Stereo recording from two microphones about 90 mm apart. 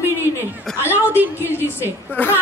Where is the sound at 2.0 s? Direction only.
20° left (ahead or behind).